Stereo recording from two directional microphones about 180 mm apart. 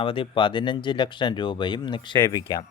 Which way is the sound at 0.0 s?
30° left (ahead or behind).